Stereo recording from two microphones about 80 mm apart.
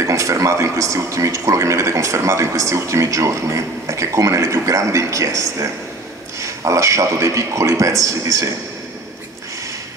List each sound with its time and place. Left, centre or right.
0.0 s speech: right